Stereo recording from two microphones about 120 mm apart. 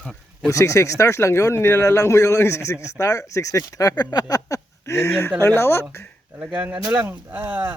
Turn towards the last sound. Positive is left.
turn(degrees=-15)  # may be behind; listen again after turning